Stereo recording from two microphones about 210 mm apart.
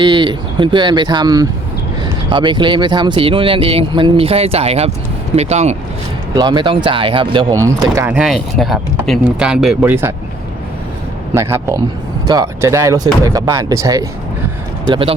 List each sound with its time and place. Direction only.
0.0 s speech: 20° right (ahead or behind)
6.3 s speech: 20° right (ahead or behind)
11.3 s speech: 10° right (ahead or behind)